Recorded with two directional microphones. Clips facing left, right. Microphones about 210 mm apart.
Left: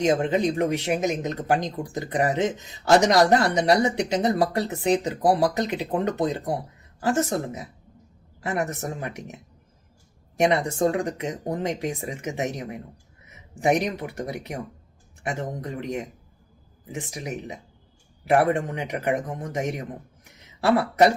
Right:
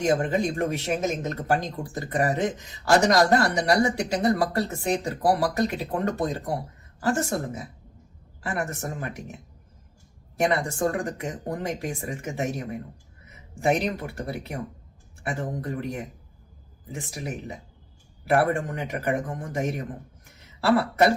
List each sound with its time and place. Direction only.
0.0 s speech: 20° left (ahead or behind)
10.3 s speech: 20° left (ahead or behind)
14.2 s speech: 20° left (ahead or behind)